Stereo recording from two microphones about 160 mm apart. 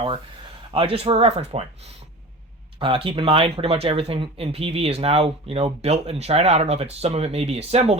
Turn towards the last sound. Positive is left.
turn(degrees=-40)  # may be behind; listen again after turning